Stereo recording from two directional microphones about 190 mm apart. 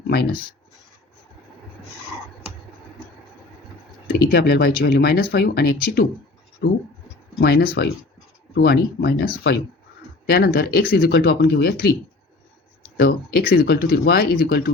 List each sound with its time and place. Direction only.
4.3 s speech: 60° left (ahead or behind)
13.0 s speech: 55° left (ahead or behind)